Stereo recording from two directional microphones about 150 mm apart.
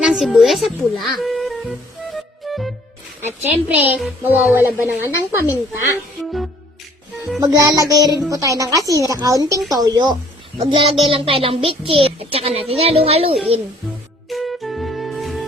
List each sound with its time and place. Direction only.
0.0 s speech: 5° right (ahead or behind)
2.1 s music: centre (ahead or behind)
3.2 s speech: 15° right (ahead or behind)
5.4 s a woman's voice: 20° left (ahead or behind)
7.4 s a woman's voice: 25° right (ahead or behind); by 13.4 s 40° right (ahead or behind)
14.3 s music: centre (ahead or behind)